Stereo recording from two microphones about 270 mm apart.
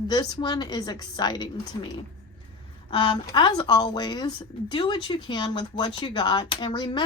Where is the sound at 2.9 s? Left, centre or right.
Centre.